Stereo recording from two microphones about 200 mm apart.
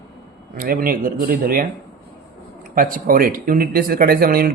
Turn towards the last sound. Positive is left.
turn(degrees=-50)  # may be behind; listen again after turning